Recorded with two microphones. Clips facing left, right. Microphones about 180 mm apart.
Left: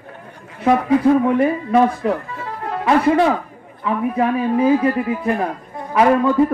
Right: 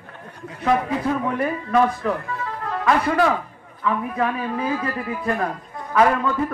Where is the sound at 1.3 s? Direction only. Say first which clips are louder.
Left 5 dB; 30° left (ahead or behind).